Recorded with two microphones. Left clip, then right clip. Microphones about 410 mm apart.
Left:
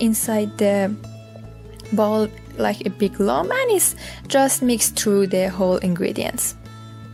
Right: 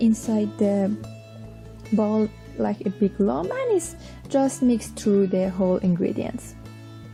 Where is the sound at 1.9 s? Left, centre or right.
Left.